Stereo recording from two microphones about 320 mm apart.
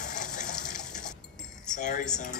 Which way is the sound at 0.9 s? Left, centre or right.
Centre.